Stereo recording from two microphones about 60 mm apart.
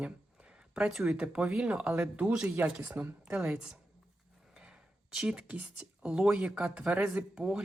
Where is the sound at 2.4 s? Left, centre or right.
Right.